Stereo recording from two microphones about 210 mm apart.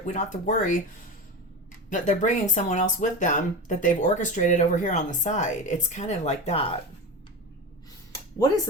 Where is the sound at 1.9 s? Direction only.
35° left (ahead or behind).